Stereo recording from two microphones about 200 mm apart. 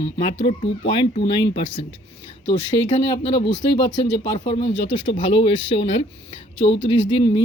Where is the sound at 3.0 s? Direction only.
30° left (ahead or behind).